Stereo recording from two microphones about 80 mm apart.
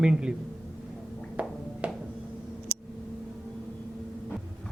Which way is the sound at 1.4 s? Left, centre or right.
Centre.